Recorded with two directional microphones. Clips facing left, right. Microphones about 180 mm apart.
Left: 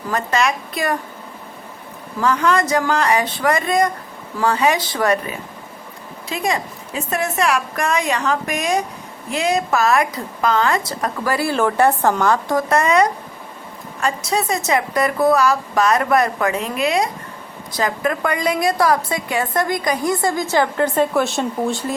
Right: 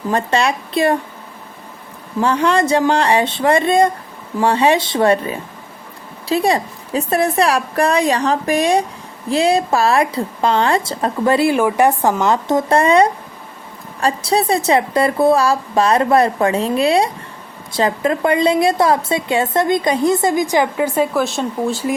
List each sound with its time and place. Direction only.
0.1 s a woman's voice: 30° right (ahead or behind)
2.2 s a woman's voice: 30° right (ahead or behind); by 21.8 s centre (ahead or behind)